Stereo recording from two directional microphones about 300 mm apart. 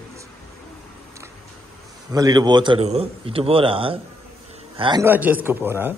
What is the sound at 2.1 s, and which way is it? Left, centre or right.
A man's voice, centre.